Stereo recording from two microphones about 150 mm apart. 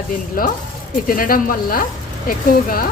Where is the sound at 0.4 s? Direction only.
70° left (ahead or behind).